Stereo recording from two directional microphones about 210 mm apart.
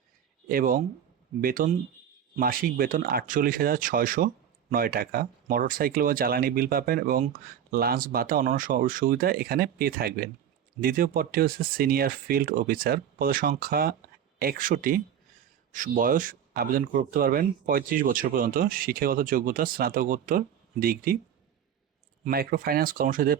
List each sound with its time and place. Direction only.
0.4 s speech: 40° right (ahead or behind)
22.2 s speech: 45° right (ahead or behind)